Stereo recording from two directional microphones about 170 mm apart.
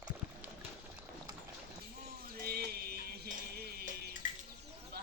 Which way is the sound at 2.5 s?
65° right (ahead or behind).